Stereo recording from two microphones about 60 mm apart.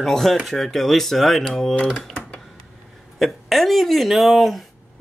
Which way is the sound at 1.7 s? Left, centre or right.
Centre.